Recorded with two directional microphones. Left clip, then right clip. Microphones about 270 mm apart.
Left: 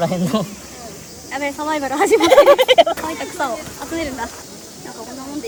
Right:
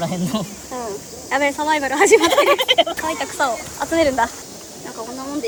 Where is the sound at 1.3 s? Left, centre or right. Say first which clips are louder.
Right 4 dB; centre.